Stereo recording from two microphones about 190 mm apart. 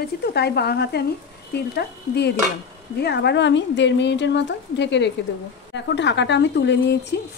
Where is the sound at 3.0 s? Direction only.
60° left (ahead or behind).